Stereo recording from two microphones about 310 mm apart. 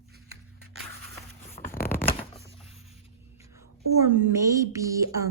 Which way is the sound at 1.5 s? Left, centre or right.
Left.